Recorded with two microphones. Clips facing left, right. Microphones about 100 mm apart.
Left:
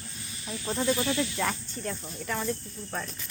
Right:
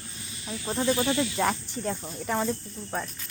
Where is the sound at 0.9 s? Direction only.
20° right (ahead or behind).